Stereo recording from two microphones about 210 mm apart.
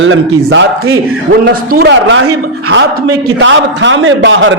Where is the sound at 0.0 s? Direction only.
60° right (ahead or behind).